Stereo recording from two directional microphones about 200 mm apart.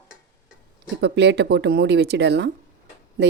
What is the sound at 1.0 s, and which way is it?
Speech, 60° right (ahead or behind).